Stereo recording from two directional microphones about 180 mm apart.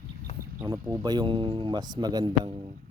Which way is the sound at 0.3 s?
35° left (ahead or behind).